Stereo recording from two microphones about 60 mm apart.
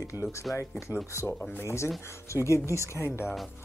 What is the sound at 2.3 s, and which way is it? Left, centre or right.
Speech, left.